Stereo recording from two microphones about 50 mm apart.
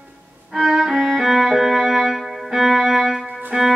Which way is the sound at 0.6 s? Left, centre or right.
Centre.